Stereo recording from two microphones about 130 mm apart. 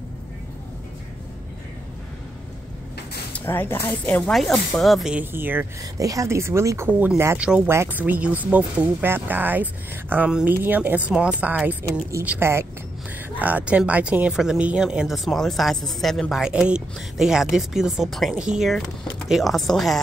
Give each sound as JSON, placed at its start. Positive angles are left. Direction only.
{"t": 3.3, "sound": "speech", "side_deg": 15}
{"t": 4.3, "sound": "speech", "side_deg": 5}
{"t": 5.2, "sound": "speech", "side_deg": -15}
{"t": 5.9, "sound": "speech", "side_deg": -25}
{"t": 7.3, "sound": "speech", "side_deg": -10}